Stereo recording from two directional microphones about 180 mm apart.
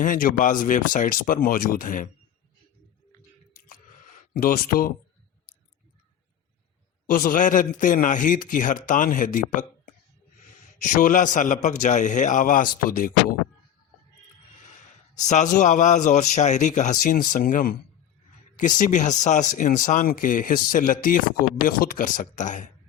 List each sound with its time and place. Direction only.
0.0 s speech: 50° left (ahead or behind)
4.4 s speech: 55° left (ahead or behind)
7.1 s speech: 50° left (ahead or behind)
10.8 s speech: 45° left (ahead or behind)
15.1 s speech: 40° left (ahead or behind)